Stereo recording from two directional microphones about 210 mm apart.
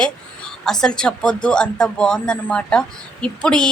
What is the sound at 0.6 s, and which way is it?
A woman's voice, 5° left (ahead or behind).